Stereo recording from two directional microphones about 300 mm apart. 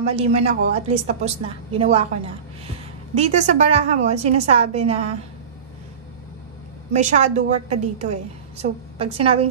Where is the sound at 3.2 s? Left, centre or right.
Right.